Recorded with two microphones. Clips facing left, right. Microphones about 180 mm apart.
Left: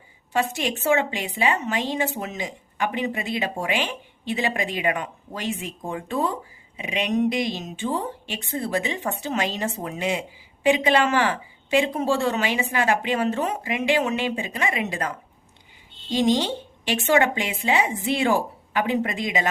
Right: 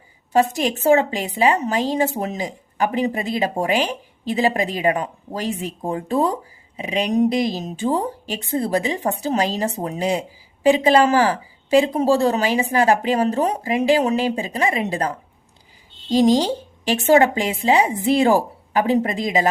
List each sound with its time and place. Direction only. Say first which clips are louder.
0.3 s speech: right 6 dB; 40° right (ahead or behind)